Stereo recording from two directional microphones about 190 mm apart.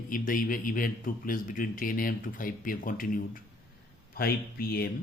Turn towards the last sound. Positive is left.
turn(degrees=55)  # may be behind; listen again after turning